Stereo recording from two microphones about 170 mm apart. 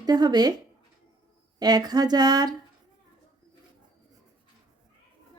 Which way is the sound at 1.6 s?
25° right (ahead or behind).